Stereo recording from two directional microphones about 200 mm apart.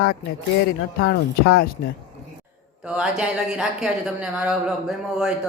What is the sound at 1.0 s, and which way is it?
Speech, 50° left (ahead or behind).